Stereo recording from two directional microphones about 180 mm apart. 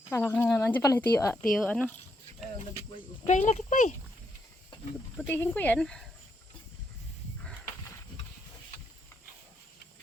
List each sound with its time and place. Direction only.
0.1 s speech: 10° left (ahead or behind)
1.5 s speech: centre (ahead or behind)
2.9 s speech: 40° left (ahead or behind)
5.1 s speech: 10° left (ahead or behind)